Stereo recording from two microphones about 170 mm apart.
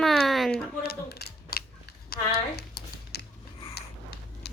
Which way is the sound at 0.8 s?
65° left (ahead or behind).